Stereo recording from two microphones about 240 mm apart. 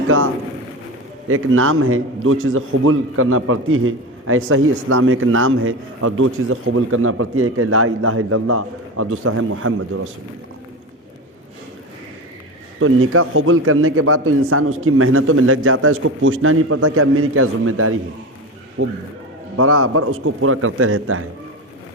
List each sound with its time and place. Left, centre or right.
1.3 s a man's voice: right
12.8 s a man's voice: right